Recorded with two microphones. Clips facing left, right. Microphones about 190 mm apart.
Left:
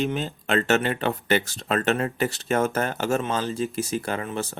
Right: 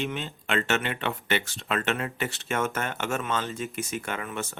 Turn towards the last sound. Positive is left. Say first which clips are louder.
# left 5 dB
turn(degrees=35)  # may be behind; listen again after turning